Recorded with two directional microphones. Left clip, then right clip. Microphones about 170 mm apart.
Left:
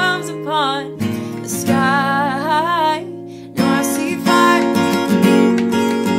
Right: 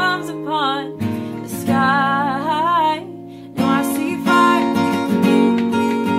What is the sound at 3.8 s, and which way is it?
Music, 25° left (ahead or behind).